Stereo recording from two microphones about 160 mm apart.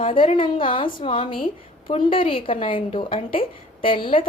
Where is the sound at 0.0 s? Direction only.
35° left (ahead or behind).